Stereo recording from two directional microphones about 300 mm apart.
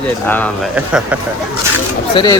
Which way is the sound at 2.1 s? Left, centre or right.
Centre.